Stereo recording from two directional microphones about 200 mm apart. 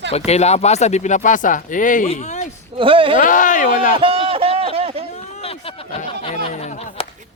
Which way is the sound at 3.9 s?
25° right (ahead or behind).